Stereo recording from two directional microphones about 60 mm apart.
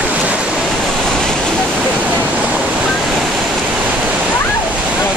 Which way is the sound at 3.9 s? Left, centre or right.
Right.